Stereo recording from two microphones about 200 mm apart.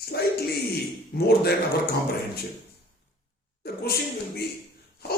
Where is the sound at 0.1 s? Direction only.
55° left (ahead or behind).